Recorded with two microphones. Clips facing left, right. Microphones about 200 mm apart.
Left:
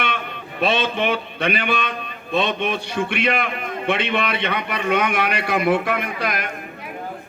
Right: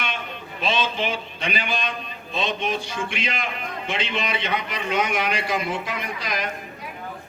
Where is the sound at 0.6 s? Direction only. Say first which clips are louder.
Left 4 dB; 60° left (ahead or behind).